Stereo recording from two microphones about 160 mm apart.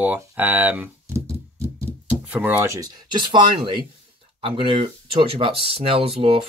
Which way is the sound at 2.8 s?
30° right (ahead or behind).